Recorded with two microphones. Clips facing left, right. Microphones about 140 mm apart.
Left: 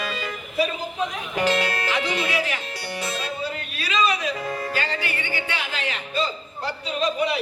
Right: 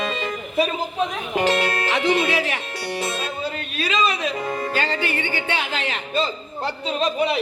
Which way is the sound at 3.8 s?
25° right (ahead or behind).